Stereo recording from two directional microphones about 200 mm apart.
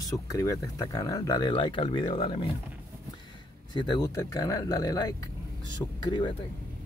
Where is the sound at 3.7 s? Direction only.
20° left (ahead or behind).